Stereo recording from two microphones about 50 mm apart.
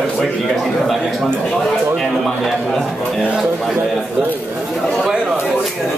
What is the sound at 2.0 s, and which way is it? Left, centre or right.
Speech, centre.